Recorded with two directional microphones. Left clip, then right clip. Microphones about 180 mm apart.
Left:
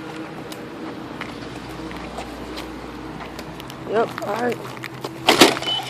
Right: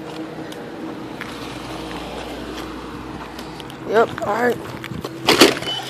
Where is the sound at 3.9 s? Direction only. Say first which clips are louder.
Right 4 dB; 35° right (ahead or behind).